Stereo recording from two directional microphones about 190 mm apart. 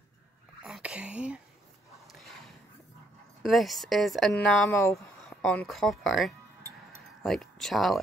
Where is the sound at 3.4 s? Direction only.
Centre (ahead or behind).